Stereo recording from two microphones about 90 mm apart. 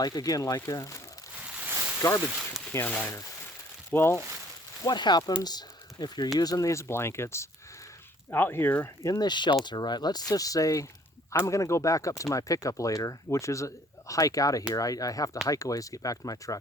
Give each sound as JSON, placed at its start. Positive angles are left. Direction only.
{"t": 0.0, "sound": "speech", "side_deg": 45}
{"t": 2.7, "sound": "speech", "side_deg": 20}
{"t": 4.8, "sound": "speech", "side_deg": 55}
{"t": 9.0, "sound": "speech", "side_deg": 45}